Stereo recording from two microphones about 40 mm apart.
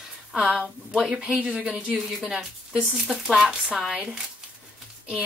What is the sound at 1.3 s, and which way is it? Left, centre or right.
Speech, right.